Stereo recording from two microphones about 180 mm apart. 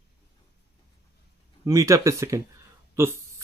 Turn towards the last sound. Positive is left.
turn(degrees=-15)  # may be behind; listen again after turning